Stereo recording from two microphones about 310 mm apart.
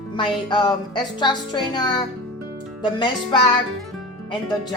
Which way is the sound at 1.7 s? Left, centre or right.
Centre.